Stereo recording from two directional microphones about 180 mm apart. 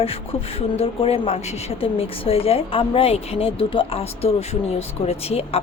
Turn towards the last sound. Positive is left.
turn(degrees=35)  # may be behind; listen again after turning